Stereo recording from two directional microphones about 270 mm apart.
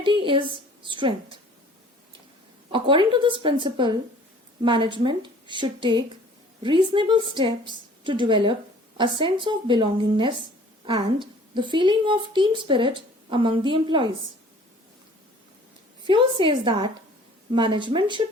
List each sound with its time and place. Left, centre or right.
0.0 s a sound: centre
0.9 s a woman's voice: centre
2.7 s a woman's voice: centre
16.0 s a woman's voice: centre